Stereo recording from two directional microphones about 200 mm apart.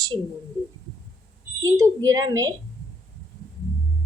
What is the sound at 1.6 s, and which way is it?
Speech, 20° right (ahead or behind).